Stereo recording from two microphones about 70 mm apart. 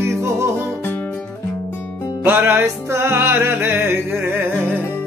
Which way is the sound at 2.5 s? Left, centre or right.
Right.